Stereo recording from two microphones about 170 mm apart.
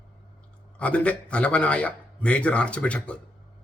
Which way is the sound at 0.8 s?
5° left (ahead or behind).